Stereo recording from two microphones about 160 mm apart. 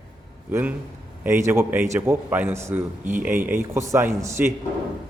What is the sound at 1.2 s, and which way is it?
A man's voice, 15° right (ahead or behind).